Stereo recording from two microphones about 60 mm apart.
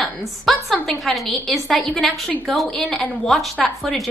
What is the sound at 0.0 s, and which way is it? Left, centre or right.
A woman's voice, centre.